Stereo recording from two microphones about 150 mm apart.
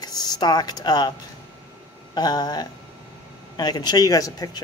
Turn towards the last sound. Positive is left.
turn(degrees=25)  # may be behind; listen again after turning